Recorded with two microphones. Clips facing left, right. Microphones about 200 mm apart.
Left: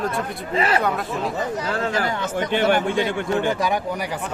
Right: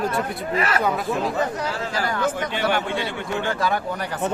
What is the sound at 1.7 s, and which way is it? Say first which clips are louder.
Speech: left 4 dB; 55° left (ahead or behind).